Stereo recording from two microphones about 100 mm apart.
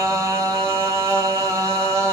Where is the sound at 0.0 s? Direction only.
30° right (ahead or behind).